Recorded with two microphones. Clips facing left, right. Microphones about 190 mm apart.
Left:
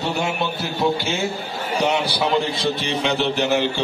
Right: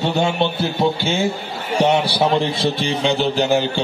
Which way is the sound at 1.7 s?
30° right (ahead or behind).